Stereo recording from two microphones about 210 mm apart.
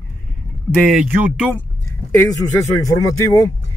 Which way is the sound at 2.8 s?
15° left (ahead or behind).